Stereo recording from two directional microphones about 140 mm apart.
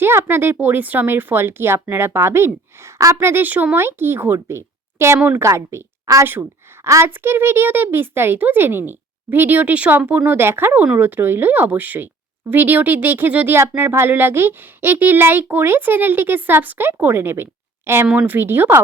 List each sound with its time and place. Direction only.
0.0 s speech: 15° right (ahead or behind)